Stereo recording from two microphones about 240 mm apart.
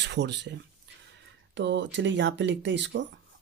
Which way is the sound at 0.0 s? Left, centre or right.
Right.